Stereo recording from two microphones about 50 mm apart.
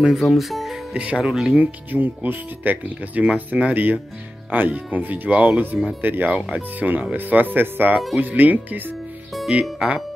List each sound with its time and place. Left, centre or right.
0.1 s speech: centre
1.2 s speech: centre
1.5 s speech: right
3.7 s speech: right
5.7 s speech: centre
6.0 s speech: right